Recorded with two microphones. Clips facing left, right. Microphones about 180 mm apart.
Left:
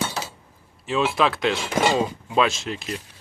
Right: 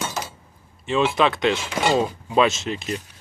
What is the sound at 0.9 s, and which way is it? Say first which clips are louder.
Speech: right 2 dB; centre (ahead or behind).